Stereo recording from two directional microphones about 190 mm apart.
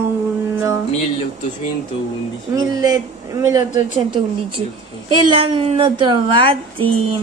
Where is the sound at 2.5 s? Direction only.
20° right (ahead or behind).